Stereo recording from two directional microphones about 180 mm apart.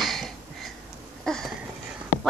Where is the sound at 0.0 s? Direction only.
Centre (ahead or behind).